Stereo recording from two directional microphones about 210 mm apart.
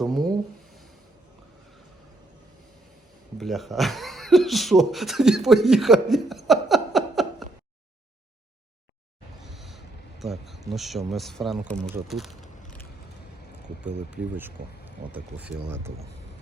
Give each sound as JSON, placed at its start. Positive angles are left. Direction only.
{"t": 0.0, "sound": "a sound", "side_deg": 0}
{"t": 3.3, "sound": "speech", "side_deg": 0}
{"t": 9.4, "sound": "speech", "side_deg": 0}
{"t": 13.8, "sound": "speech", "side_deg": -5}